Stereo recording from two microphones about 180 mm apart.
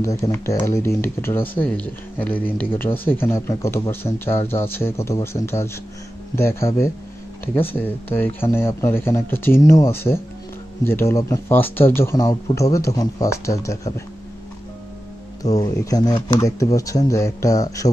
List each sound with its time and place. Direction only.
0.0 s speech: 15° left (ahead or behind)
15.4 s speech: 20° left (ahead or behind)